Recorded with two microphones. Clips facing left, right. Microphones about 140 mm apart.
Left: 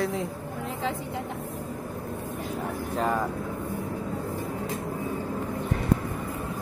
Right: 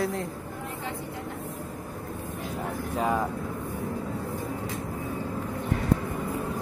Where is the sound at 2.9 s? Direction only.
10° right (ahead or behind).